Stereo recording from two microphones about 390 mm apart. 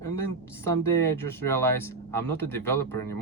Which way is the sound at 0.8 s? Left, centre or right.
Centre.